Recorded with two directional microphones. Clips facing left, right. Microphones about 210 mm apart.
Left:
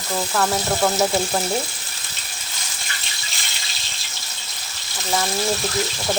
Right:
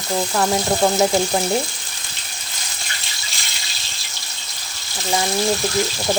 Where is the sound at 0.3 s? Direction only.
15° right (ahead or behind).